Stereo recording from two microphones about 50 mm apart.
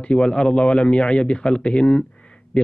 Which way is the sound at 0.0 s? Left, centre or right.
Centre.